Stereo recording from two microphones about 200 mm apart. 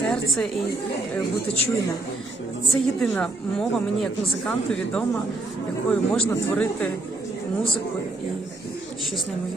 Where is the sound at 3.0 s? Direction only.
5° left (ahead or behind).